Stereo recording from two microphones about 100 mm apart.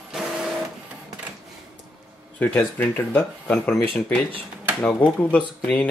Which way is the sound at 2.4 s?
20° left (ahead or behind).